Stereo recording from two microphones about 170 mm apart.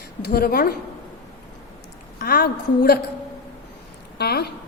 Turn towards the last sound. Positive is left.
turn(degrees=70)  # may be behind; listen again after turning